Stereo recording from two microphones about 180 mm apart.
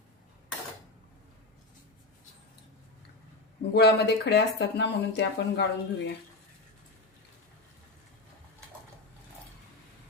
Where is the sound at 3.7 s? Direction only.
65° left (ahead or behind).